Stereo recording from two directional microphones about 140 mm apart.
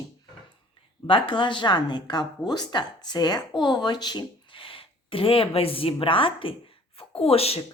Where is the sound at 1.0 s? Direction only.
35° left (ahead or behind).